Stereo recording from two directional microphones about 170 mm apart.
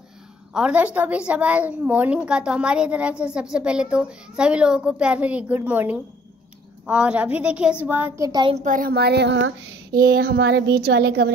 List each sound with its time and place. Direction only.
0.5 s a woman's voice: 5° right (ahead or behind)
8.3 s a woman's voice: 25° right (ahead or behind)
8.5 s child singing: 50° right (ahead or behind); by 11.3 s 70° right (ahead or behind)